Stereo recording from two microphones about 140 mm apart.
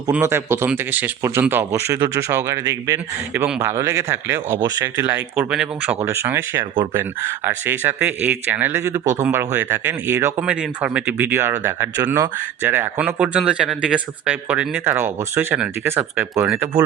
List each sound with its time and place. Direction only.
0.1 s speech: 20° right (ahead or behind)
6.0 s speech: 20° right (ahead or behind)
10.4 s speech: 10° right (ahead or behind)